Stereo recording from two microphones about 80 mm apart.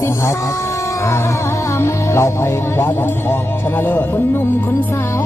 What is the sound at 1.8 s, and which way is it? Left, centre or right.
Music, left.